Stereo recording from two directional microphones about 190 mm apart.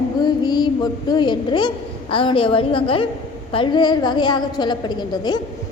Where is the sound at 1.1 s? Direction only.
25° left (ahead or behind).